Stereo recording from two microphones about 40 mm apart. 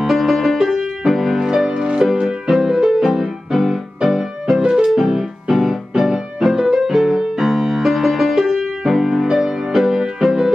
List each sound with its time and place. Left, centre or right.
0.0 s music: centre
4.6 s music: centre
4.9 s music: centre